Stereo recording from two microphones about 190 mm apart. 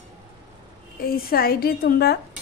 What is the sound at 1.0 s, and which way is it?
A woman's voice, 50° left (ahead or behind).